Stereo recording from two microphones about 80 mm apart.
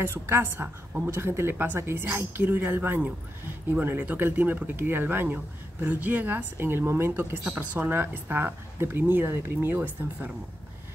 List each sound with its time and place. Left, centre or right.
0.0 s speech: right